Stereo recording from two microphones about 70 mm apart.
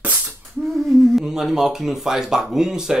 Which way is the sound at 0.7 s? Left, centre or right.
Centre.